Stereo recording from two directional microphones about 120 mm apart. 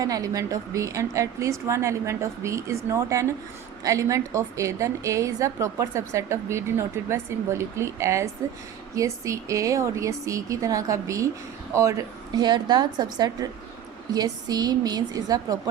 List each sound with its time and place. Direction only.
0.0 s a woman's voice: 30° right (ahead or behind)